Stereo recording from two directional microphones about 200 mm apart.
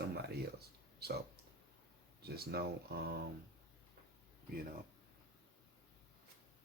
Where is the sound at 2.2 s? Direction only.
50° right (ahead or behind).